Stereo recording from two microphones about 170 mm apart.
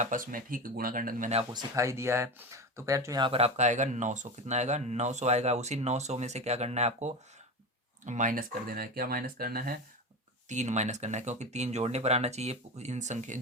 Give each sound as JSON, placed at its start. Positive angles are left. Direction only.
{"t": 0.0, "sound": "speech", "side_deg": -50}
{"t": 1.5, "sound": "speech", "side_deg": -20}
{"t": 10.5, "sound": "speech", "side_deg": -45}